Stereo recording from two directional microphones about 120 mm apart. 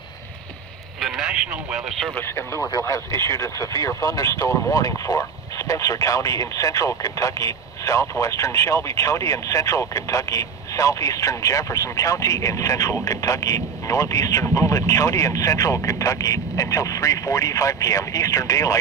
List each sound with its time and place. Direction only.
1.0 s speech: 5° right (ahead or behind)
2.1 s speech: 20° left (ahead or behind)